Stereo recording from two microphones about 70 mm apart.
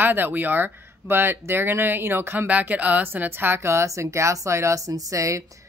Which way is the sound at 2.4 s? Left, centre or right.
Right.